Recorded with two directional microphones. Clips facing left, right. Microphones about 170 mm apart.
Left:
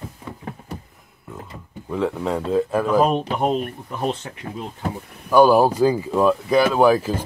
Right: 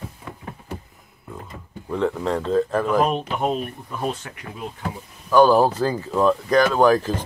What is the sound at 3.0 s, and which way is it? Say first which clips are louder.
Speech: left 2 dB; 35° left (ahead or behind).